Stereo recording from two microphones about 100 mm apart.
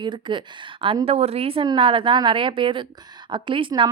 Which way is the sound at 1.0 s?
90° right.